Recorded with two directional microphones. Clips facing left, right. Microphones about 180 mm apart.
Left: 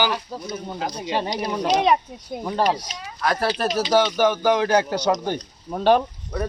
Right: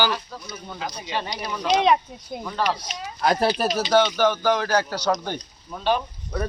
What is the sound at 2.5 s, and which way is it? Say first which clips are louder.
Speech: left 4 dB; 45° left (ahead or behind).